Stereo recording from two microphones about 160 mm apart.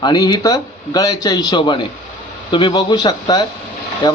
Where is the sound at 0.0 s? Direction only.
25° left (ahead or behind).